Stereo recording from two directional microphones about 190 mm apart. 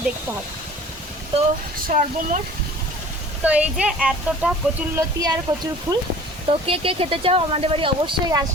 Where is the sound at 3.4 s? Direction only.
5° right (ahead or behind).